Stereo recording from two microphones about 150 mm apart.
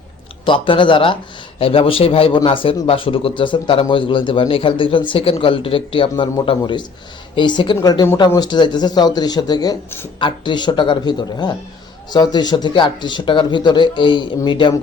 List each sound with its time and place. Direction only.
0.4 s a man's voice: 35° left (ahead or behind)